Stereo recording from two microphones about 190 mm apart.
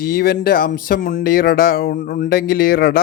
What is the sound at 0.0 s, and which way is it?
Speech, 50° left (ahead or behind).